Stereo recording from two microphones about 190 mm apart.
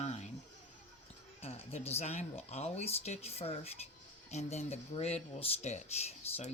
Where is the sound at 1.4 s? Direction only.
35° left (ahead or behind).